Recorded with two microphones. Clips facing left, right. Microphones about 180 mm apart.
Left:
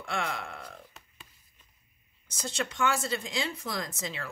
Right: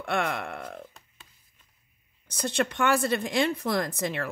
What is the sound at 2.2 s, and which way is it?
Speech, 60° right (ahead or behind).